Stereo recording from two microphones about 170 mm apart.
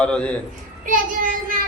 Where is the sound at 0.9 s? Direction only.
55° right (ahead or behind).